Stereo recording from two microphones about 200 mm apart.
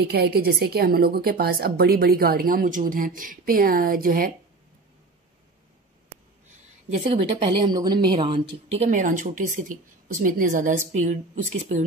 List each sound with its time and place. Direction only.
0.0 s a woman's voice: 50° right (ahead or behind)
6.9 s a woman's voice: 30° right (ahead or behind)
8.8 s a woman's voice: 40° right (ahead or behind)